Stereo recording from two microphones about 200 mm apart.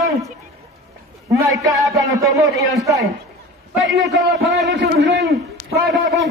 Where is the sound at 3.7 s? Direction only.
Centre (ahead or behind).